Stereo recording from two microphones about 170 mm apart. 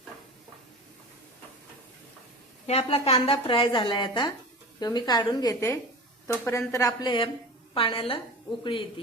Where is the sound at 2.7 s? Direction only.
35° left (ahead or behind).